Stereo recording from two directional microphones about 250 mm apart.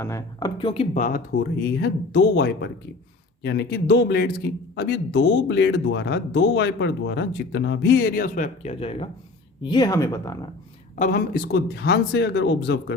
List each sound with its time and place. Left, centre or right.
0.0 s speech: centre; by 1.2 s left
1.4 s a man's voice: left; by 10.5 s centre
10.9 s speech: left